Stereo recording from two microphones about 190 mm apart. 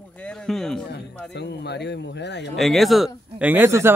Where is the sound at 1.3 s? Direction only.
60° left (ahead or behind).